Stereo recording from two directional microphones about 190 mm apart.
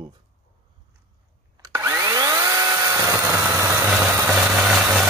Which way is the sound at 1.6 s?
15° right (ahead or behind).